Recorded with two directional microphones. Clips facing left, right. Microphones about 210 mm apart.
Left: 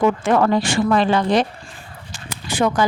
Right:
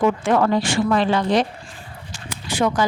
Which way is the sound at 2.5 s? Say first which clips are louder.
Left 1 dB; 55° left (ahead or behind).